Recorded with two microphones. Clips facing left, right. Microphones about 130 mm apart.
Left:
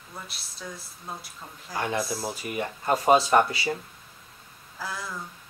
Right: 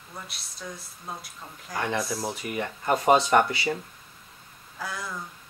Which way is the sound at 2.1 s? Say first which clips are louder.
Right 1 dB; 25° left (ahead or behind).